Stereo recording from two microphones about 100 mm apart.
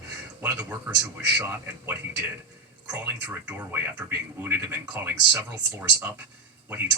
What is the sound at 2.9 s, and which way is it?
Speech, 20° right (ahead or behind).